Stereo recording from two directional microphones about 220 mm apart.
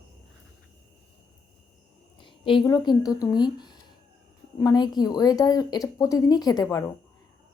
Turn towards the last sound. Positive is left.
turn(degrees=15)  # may be behind; listen again after turning